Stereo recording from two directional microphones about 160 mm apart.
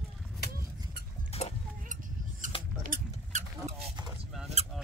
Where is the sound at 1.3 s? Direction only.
40° left (ahead or behind).